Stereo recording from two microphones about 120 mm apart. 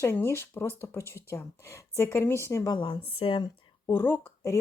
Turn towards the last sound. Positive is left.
turn(degrees=20)  # may be behind; listen again after turning